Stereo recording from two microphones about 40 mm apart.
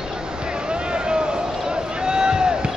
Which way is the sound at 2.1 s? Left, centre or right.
Centre.